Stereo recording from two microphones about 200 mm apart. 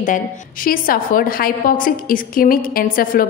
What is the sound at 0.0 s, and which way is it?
A woman's voice, 45° left (ahead or behind).